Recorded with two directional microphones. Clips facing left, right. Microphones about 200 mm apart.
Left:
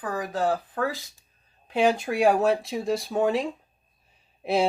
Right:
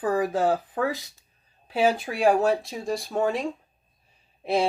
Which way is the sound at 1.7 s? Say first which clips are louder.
Left 1 dB; 5° right (ahead or behind).